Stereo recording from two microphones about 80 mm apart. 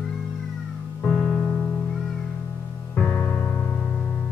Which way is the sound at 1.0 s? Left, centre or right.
Centre.